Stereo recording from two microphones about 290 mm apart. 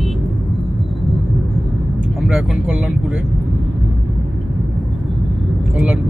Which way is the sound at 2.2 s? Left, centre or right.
Centre.